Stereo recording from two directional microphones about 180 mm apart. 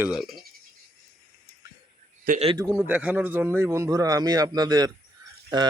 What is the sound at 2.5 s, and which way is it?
Speech, 15° right (ahead or behind).